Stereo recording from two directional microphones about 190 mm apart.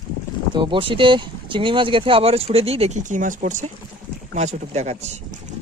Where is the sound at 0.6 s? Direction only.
25° right (ahead or behind).